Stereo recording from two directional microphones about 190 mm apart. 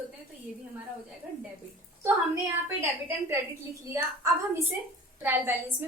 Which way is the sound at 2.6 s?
10° right (ahead or behind).